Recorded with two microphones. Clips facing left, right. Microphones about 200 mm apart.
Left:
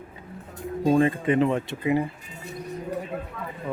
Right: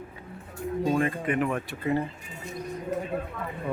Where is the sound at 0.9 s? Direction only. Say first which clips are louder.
Left 7 dB; 30° left (ahead or behind).